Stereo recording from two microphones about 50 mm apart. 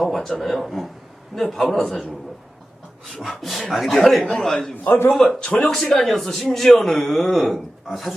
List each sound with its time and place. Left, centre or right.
0.0 s a man's voice: centre
3.2 s a man's voice: centre
4.8 s a man's voice: left
5.4 s speech: centre
5.6 s a man's voice: centre